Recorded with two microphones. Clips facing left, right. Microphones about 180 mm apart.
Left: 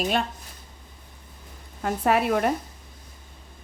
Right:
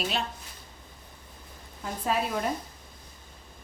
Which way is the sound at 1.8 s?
70° left (ahead or behind).